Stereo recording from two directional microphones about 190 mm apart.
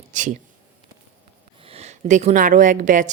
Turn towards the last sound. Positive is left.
turn(degrees=-45)  # may be behind; listen again after turning